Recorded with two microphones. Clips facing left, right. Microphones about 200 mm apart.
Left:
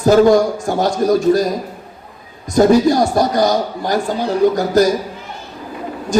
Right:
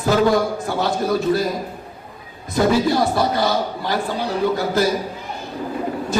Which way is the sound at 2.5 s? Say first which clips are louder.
Left 6 dB; 45° left (ahead or behind).